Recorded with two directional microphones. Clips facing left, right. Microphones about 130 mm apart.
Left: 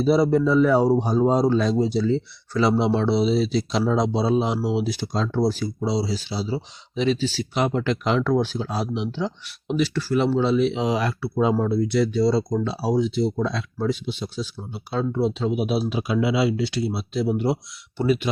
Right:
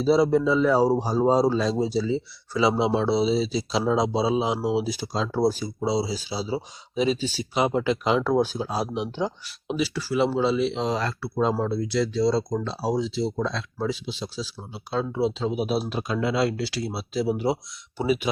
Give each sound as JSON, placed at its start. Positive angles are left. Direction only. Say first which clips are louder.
{"t": 0.0, "sound": "speech", "louder": "left 1 dB", "side_deg": 0}